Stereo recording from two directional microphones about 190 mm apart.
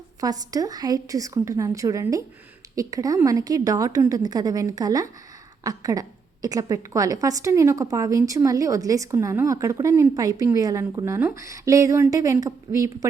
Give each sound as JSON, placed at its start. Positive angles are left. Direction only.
{"t": 0.2, "sound": "a woman's voice", "side_deg": -20}